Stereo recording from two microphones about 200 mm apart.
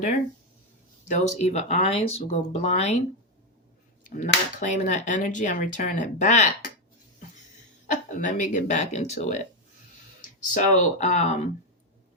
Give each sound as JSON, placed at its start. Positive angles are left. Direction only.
{"t": 1.0, "sound": "speech", "side_deg": 35}
{"t": 4.6, "sound": "speech", "side_deg": 40}
{"t": 7.9, "sound": "speech", "side_deg": 40}
{"t": 10.5, "sound": "speech", "side_deg": 40}